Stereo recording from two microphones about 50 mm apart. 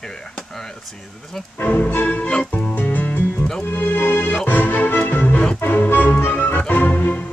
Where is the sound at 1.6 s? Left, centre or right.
Left.